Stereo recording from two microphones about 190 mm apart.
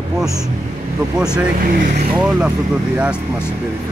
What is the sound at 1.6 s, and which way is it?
Speech, 45° right (ahead or behind).